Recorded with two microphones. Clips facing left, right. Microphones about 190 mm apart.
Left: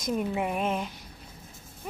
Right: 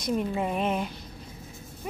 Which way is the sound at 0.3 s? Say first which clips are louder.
Right 1 dB; 10° left (ahead or behind).